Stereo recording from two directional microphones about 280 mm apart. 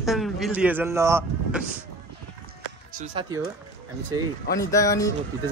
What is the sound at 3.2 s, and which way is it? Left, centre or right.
Speech, centre.